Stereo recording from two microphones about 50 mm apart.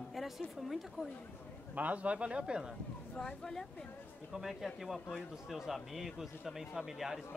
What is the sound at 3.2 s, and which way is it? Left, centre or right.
Speech, centre.